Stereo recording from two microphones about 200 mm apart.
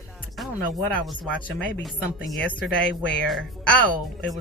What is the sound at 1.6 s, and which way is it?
Speech, 5° left (ahead or behind).